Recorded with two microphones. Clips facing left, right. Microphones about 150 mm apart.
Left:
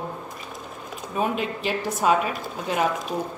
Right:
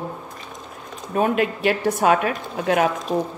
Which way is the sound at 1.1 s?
55° right (ahead or behind).